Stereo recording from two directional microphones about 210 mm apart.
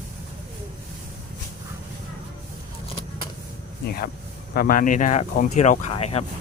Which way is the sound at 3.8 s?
45° left (ahead or behind).